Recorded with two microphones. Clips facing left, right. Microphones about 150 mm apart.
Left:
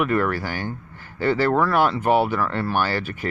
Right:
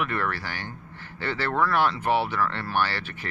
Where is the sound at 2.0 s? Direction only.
45° left (ahead or behind).